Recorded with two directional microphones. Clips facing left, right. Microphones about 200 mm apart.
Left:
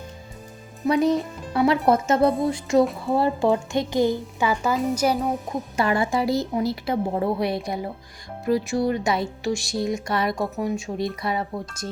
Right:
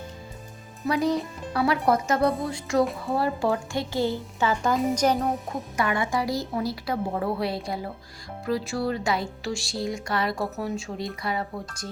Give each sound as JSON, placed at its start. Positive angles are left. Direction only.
{"t": 0.9, "sound": "a woman's voice", "side_deg": 20}
{"t": 5.7, "sound": "a woman's voice", "side_deg": 30}